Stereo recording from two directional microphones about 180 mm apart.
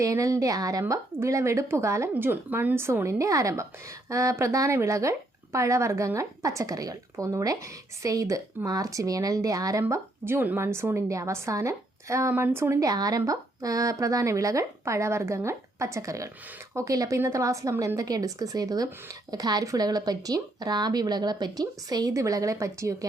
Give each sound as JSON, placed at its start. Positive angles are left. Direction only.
{"t": 0.0, "sound": "speech", "side_deg": -20}